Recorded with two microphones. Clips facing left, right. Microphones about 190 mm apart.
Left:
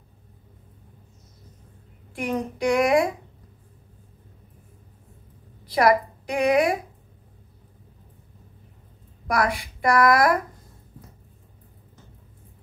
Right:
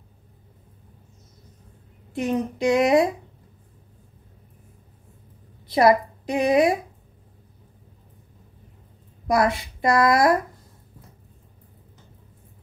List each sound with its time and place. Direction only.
2.1 s speech: 25° right (ahead or behind)
5.7 s a woman's voice: 25° right (ahead or behind)
9.3 s speech: 25° right (ahead or behind)